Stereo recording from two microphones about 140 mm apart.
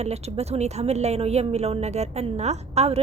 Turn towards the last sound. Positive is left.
turn(degrees=-50)  # may be behind; listen again after turning